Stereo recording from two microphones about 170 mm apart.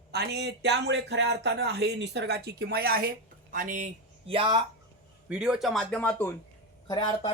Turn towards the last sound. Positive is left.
turn(degrees=25)  # may be behind; listen again after turning